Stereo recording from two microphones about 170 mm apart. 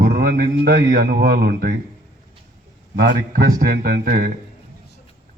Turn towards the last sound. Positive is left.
turn(degrees=-60)  # may be behind; listen again after turning